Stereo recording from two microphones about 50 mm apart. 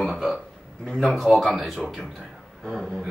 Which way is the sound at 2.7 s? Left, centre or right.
Centre.